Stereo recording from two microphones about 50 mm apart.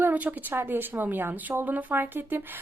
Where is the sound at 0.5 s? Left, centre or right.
Right.